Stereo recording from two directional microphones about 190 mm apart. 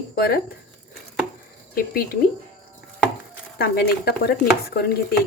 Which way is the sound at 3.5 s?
55° left (ahead or behind).